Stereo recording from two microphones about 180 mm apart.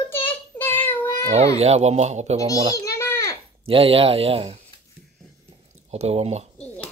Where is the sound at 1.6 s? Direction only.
35° right (ahead or behind).